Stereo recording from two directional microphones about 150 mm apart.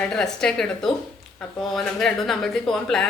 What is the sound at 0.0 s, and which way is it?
Speech, 5° left (ahead or behind).